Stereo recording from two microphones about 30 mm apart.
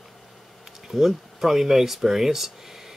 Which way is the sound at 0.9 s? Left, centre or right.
Centre.